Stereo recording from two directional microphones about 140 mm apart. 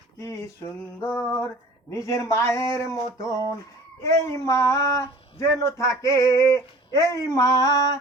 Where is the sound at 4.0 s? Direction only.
20° left (ahead or behind).